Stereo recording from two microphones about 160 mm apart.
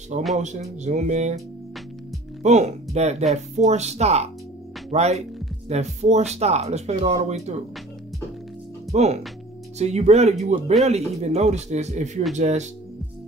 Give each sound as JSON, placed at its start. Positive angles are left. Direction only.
{"t": 0.4, "sound": "speech", "side_deg": -45}
{"t": 2.4, "sound": "speech", "side_deg": -45}
{"t": 8.9, "sound": "speech", "side_deg": -45}